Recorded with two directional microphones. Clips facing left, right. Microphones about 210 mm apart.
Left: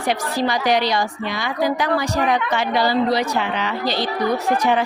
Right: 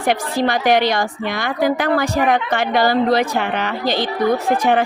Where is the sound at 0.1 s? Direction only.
55° right (ahead or behind).